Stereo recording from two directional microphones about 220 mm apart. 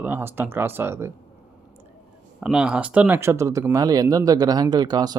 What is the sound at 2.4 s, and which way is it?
Speech, 5° right (ahead or behind).